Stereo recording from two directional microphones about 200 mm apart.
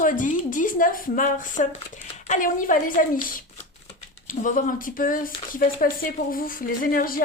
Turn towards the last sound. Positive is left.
turn(degrees=45)  # may be behind; listen again after turning